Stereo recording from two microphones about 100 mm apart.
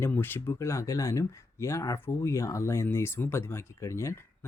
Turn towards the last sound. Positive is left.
turn(degrees=30)  # may be behind; listen again after turning